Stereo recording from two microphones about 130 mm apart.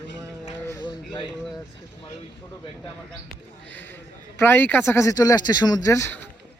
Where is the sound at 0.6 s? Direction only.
35° left (ahead or behind).